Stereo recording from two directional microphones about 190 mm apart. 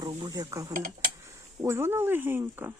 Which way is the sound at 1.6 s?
15° right (ahead or behind).